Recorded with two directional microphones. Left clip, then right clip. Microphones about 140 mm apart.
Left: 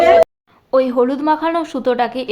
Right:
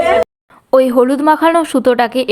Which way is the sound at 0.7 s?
40° right (ahead or behind).